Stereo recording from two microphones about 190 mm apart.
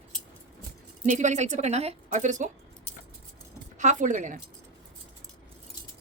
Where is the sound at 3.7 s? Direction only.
40° right (ahead or behind).